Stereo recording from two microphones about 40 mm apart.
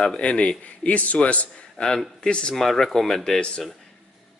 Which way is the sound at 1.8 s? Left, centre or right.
Left.